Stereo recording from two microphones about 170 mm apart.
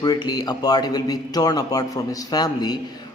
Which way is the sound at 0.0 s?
25° left (ahead or behind).